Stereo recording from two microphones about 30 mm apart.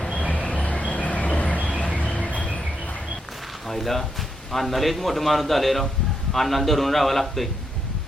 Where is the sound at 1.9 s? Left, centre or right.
Left.